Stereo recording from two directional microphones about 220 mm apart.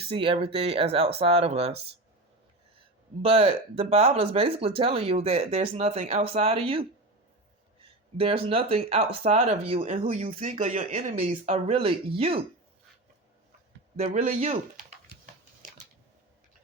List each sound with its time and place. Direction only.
0.0 s speech: 25° right (ahead or behind)
3.2 s speech: 25° right (ahead or behind)
8.2 s speech: 25° right (ahead or behind)
14.0 s speech: 35° right (ahead or behind)